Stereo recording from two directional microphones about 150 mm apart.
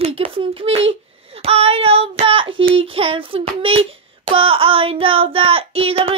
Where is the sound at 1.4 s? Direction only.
45° right (ahead or behind).